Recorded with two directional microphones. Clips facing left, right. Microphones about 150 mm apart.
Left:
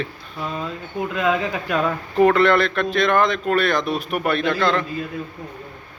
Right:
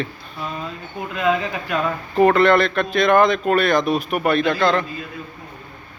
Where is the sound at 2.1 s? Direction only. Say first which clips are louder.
Right 1 dB; centre (ahead or behind).